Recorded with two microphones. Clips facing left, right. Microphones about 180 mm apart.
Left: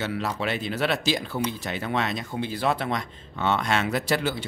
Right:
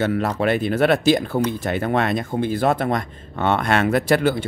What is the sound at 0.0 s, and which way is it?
Speech, 50° right (ahead or behind).